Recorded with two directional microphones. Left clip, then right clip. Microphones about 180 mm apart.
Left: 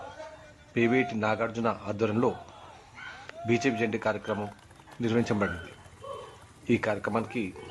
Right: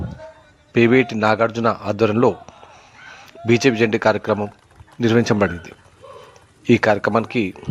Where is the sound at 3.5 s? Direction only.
45° right (ahead or behind).